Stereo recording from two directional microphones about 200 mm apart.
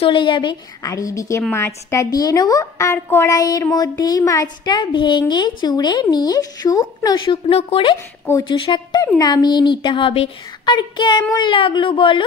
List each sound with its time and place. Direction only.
0.0 s a woman's voice: 25° left (ahead or behind)